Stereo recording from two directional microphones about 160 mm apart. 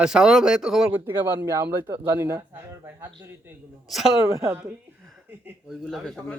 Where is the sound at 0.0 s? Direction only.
5° right (ahead or behind).